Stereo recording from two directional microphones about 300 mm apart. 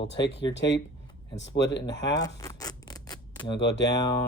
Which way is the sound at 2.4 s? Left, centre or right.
Centre.